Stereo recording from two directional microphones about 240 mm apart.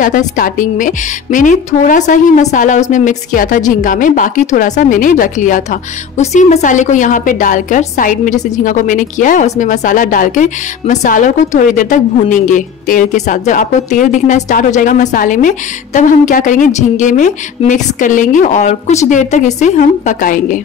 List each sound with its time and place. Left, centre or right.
0.0 s a woman's voice: left